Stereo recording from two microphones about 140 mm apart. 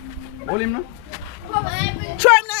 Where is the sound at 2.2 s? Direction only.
5° left (ahead or behind).